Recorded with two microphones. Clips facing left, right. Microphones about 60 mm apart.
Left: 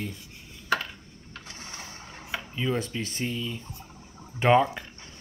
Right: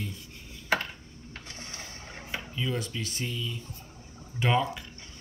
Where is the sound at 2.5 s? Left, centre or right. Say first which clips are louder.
Left 4 dB; left.